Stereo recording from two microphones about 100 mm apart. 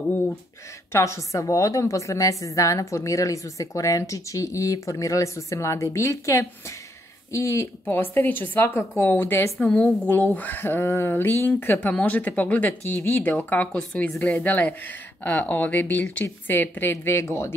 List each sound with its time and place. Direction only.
0.9 s a woman's voice: 30° left (ahead or behind)